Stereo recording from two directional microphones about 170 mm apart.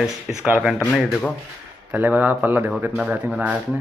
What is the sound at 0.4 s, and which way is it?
Speech, 5° right (ahead or behind).